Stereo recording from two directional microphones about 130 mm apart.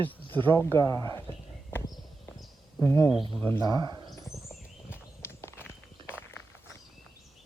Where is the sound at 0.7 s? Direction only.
25° left (ahead or behind).